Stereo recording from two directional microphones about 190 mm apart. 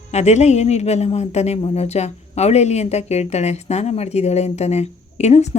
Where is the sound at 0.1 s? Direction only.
35° left (ahead or behind).